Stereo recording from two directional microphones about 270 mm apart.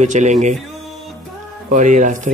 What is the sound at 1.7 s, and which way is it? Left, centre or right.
Speech, right.